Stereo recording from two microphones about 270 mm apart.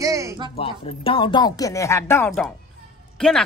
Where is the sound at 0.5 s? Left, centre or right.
Left.